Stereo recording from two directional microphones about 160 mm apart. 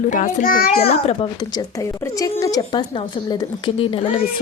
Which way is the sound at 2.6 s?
30° left (ahead or behind).